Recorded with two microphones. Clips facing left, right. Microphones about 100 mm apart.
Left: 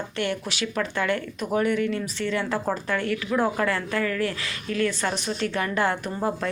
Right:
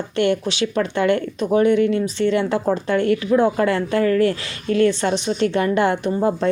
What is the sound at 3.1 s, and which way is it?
Speech, 40° right (ahead or behind).